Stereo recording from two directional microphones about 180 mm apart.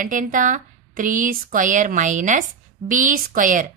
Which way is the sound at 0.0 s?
45° right (ahead or behind).